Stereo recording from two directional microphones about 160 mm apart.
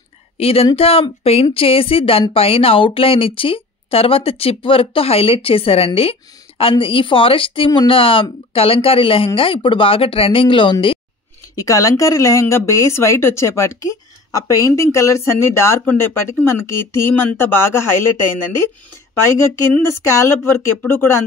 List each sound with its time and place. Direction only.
0.4 s speech: 40° left (ahead or behind)
11.5 s speech: 20° left (ahead or behind)
19.7 s speech: 15° left (ahead or behind)